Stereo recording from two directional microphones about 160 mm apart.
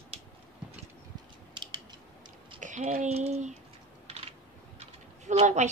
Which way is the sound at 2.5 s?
50° right (ahead or behind).